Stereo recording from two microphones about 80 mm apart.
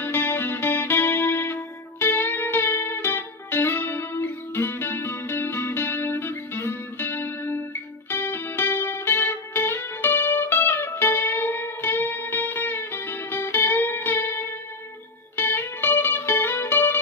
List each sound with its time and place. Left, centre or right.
0.0 s music: left